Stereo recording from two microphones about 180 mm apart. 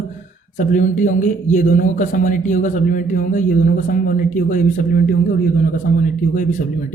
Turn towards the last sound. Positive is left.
turn(degrees=45)  # may be behind; listen again after turning